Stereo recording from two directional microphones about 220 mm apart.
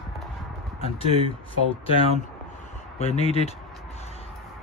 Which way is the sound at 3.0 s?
30° left (ahead or behind).